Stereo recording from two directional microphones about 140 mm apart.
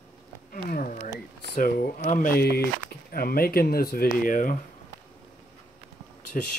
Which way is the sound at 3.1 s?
90° left.